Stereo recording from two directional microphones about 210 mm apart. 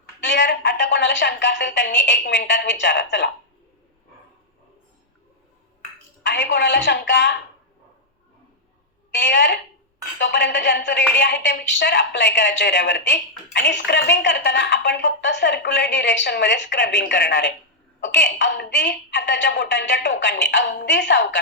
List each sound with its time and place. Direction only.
0.2 s a woman's voice: 55° left (ahead or behind)
6.2 s a woman's voice: 55° left (ahead or behind)
9.1 s a woman's voice: 55° left (ahead or behind)